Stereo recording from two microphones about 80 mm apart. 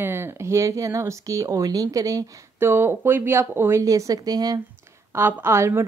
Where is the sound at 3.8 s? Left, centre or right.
Right.